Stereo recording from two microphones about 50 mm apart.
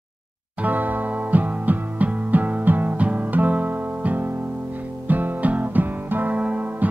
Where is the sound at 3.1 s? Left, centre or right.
Right.